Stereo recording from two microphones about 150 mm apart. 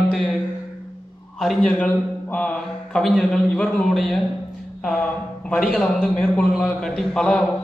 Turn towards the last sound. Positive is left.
turn(degrees=5)  # may be behind; listen again after turning